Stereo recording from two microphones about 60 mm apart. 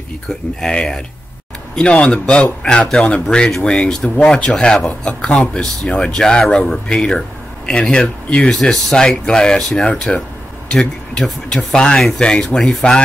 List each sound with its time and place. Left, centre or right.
0.6 s speech: centre